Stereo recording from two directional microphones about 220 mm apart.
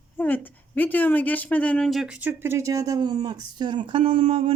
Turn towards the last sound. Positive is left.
turn(degrees=-25)  # may be behind; listen again after turning